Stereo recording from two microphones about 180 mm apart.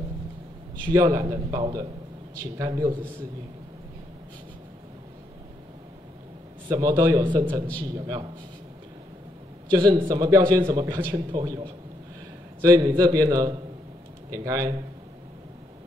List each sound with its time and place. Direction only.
0.9 s a man's voice: 20° right (ahead or behind)
6.7 s a man's voice: 20° right (ahead or behind)
9.7 s a man's voice: 20° right (ahead or behind)